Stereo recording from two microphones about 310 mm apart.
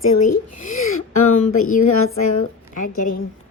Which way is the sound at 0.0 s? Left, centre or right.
Left.